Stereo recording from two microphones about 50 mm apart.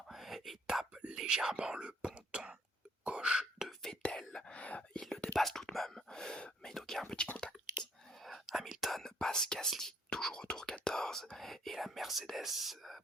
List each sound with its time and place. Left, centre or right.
0.1 s whispering: centre
0.7 s whispering: centre
3.0 s a sound: right
4.1 s whispering: centre
4.5 s whispering: left
5.4 s whispering: centre
8.2 s whispering: centre
8.8 s whispering: centre